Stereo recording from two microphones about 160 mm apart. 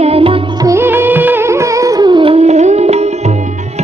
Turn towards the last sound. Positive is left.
turn(degrees=-40)  # may be behind; listen again after turning